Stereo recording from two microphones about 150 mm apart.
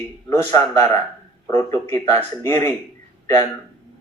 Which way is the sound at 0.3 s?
20° left (ahead or behind).